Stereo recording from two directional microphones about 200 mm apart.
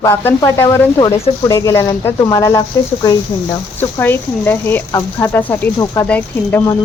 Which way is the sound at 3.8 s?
10° left (ahead or behind).